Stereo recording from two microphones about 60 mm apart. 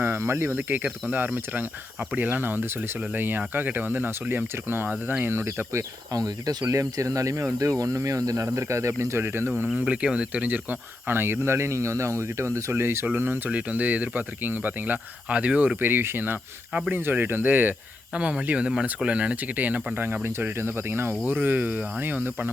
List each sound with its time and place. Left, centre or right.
0.0 s speech: right
0.5 s speech: right
6.1 s speech: right
6.7 s speech: right
9.8 s speech: centre; by 12.8 s right
12.8 s speech: right
13.5 s speech: right
15.3 s speech: centre
15.8 s speech: right
20.2 s speech: right
21.2 s speech: right